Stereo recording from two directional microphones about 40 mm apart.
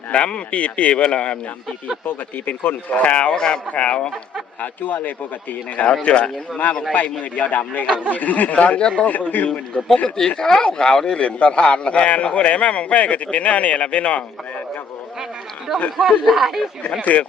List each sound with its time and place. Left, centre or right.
0.1 s a man's voice: left
2.0 s a man's voice: left
3.3 s a man's voice: centre
3.7 s a man's voice: left
5.0 s speech: left
6.0 s a man's voice: left
6.9 s a man's voice: left
9.5 s speech: centre
11.2 s a man's voice: left
15.7 s speech: centre
17.1 s a man's voice: left